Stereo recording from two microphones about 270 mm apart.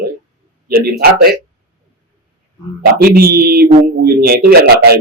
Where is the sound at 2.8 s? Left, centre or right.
Right.